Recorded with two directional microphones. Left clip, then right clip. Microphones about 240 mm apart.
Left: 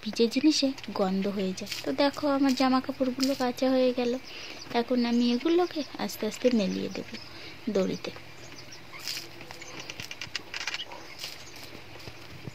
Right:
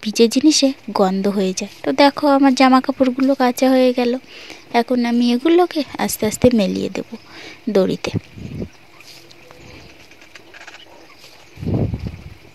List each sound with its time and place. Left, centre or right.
0.0 s speech: right